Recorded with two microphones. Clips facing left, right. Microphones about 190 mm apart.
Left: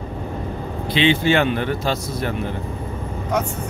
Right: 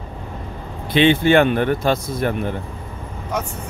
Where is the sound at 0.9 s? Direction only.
55° right (ahead or behind).